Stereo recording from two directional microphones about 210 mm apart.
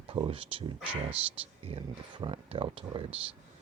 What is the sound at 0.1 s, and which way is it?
Speech, 25° right (ahead or behind).